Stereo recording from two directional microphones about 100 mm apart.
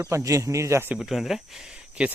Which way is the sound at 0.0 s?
30° right (ahead or behind).